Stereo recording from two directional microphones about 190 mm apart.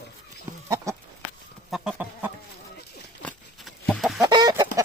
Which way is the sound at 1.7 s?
5° right (ahead or behind).